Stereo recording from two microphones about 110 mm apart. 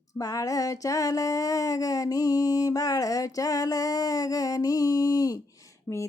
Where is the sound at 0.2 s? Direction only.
30° left (ahead or behind).